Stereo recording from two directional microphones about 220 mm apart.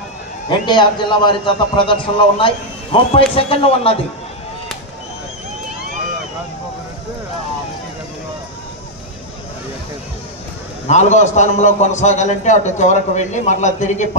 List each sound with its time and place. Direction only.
0.5 s a man's voice: 20° left (ahead or behind)
10.9 s a man's voice: 30° left (ahead or behind)